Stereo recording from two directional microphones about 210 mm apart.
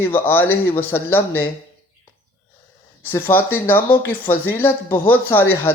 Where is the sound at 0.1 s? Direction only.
10° left (ahead or behind).